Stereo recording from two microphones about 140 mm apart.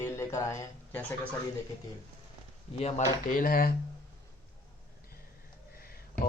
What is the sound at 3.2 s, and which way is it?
Speech, 80° left.